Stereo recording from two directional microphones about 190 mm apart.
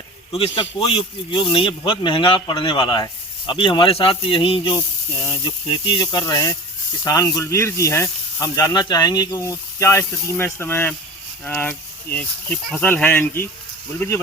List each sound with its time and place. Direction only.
0.3 s speech: 30° left (ahead or behind); by 13.5 s 10° left (ahead or behind)